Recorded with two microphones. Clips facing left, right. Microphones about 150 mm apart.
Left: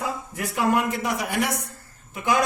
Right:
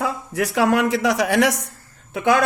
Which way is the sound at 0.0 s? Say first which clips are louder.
Right 6 dB; 90° right.